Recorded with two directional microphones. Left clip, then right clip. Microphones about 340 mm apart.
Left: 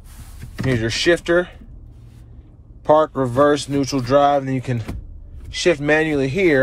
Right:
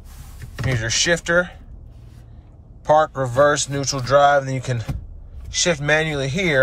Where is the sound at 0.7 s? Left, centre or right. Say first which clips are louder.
Left 2 dB; centre.